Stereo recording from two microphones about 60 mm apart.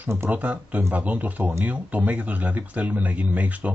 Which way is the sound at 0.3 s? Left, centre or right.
Right.